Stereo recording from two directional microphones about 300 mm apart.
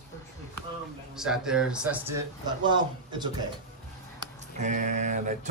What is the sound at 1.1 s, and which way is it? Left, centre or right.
Speech, centre.